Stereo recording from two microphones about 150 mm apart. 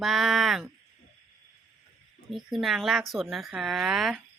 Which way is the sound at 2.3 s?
Centre (ahead or behind).